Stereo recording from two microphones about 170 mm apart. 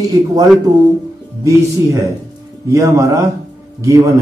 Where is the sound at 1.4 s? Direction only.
20° right (ahead or behind).